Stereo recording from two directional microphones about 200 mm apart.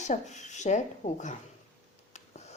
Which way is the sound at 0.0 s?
35° left (ahead or behind).